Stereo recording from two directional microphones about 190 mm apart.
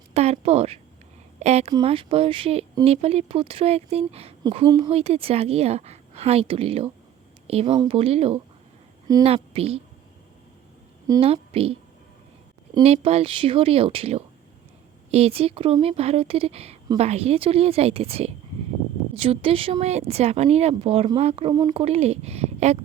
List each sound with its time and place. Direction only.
0.1 s a woman's voice: 35° right (ahead or behind)
11.0 s a sound: 20° right (ahead or behind)
11.3 s speech: 30° right (ahead or behind)
12.8 s speech: 35° right (ahead or behind)